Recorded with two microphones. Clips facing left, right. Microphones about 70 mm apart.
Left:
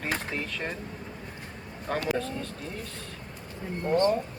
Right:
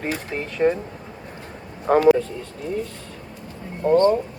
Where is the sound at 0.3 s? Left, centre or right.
Right.